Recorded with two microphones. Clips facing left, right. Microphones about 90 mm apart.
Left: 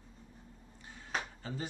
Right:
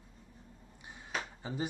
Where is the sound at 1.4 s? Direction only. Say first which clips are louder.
Right 3 dB; 15° right (ahead or behind).